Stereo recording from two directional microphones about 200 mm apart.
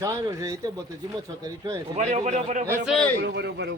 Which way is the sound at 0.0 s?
15° right (ahead or behind).